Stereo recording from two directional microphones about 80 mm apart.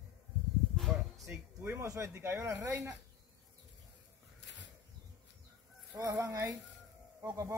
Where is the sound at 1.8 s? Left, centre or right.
Right.